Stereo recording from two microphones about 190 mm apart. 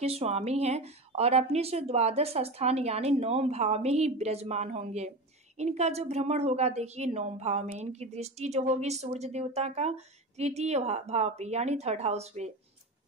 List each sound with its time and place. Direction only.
0.0 s a woman's voice: 30° right (ahead or behind)